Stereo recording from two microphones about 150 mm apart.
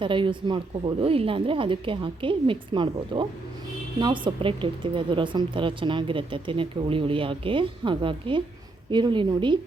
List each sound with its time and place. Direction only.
0.0 s speech: 35° right (ahead or behind)